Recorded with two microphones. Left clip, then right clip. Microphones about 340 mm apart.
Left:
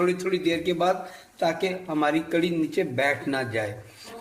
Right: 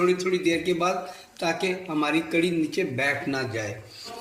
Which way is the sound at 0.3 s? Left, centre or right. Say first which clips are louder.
Right 1 dB; left.